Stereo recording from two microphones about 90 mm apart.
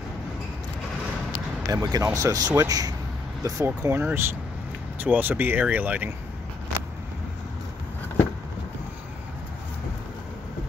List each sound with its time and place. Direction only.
1.7 s speech: 45° right (ahead or behind); by 6.1 s 20° right (ahead or behind)